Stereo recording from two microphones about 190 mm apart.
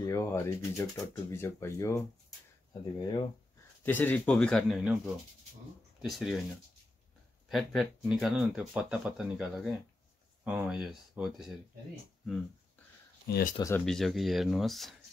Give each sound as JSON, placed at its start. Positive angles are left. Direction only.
{"t": 0.0, "sound": "speech", "side_deg": 15}
{"t": 3.8, "sound": "speech", "side_deg": 10}
{"t": 7.4, "sound": "speech", "side_deg": 0}
{"t": 13.3, "sound": "speech", "side_deg": 50}
{"t": 13.6, "sound": "speech", "side_deg": 15}
{"t": 13.8, "sound": "speech", "side_deg": 0}